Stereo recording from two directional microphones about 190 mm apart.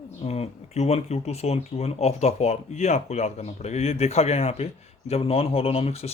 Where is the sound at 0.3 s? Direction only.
35° left (ahead or behind).